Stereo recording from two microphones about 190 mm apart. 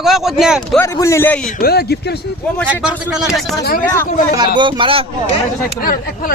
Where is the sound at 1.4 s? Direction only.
55° left (ahead or behind).